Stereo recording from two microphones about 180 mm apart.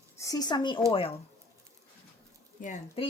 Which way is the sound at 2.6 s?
50° left (ahead or behind).